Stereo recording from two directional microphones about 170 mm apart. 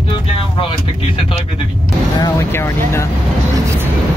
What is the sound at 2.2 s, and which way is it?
Speech, 15° left (ahead or behind).